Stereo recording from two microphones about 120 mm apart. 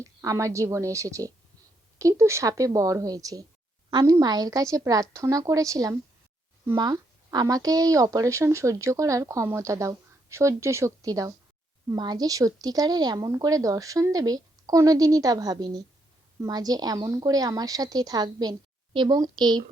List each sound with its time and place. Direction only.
0.0 s a woman's voice: 25° right (ahead or behind)